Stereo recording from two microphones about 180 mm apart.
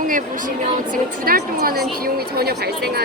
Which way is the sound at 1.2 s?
55° right (ahead or behind).